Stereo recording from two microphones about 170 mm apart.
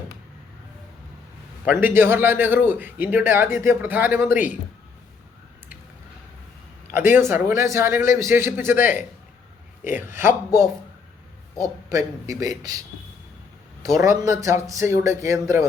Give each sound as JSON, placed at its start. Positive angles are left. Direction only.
{"t": 1.6, "sound": "a man's voice", "side_deg": -10}
{"t": 6.9, "sound": "a man's voice", "side_deg": -15}
{"t": 10.0, "sound": "a man's voice", "side_deg": -15}
{"t": 11.9, "sound": "a man's voice", "side_deg": -20}
{"t": 13.9, "sound": "a man's voice", "side_deg": -20}